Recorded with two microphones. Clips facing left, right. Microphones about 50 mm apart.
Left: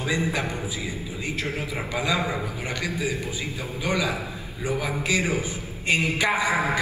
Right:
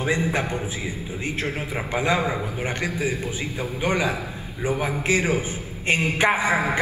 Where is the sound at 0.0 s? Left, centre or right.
Right.